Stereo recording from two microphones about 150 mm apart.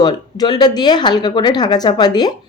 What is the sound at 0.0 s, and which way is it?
A woman's voice, 30° left (ahead or behind).